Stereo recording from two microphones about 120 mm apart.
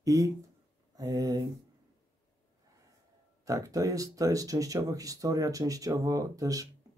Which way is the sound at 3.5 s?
30° right (ahead or behind).